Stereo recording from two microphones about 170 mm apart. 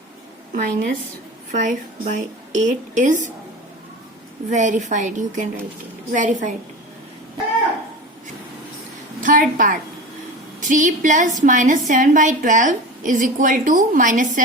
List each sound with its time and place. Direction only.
0.5 s a woman's voice: 55° right (ahead or behind)
4.4 s a woman's voice: 45° right (ahead or behind)
9.2 s a woman's voice: 50° right (ahead or behind)